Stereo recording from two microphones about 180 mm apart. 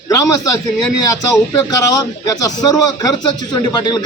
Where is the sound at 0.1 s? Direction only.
20° left (ahead or behind).